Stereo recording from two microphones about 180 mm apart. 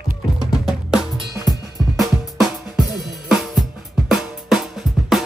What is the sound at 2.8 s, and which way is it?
Drum kit, centre (ahead or behind).